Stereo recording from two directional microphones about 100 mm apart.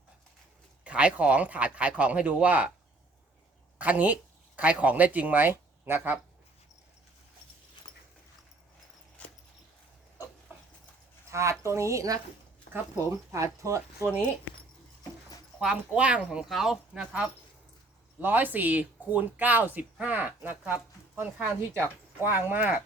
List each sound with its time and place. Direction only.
0.9 s speech: 10° right (ahead or behind)
3.8 s speech: 15° right (ahead or behind)
9.2 s a sound: 10° left (ahead or behind)
10.5 s a sound: 20° right (ahead or behind)
11.3 s speech: 30° right (ahead or behind)
14.0 s speech: 10° right (ahead or behind)
15.6 s speech: 10° right (ahead or behind)
18.2 s speech: 20° right (ahead or behind)